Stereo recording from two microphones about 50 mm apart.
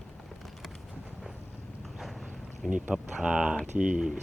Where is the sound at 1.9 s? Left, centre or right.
Centre.